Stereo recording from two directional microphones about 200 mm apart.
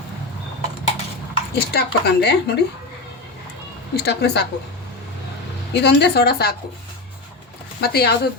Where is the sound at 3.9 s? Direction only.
55° left (ahead or behind).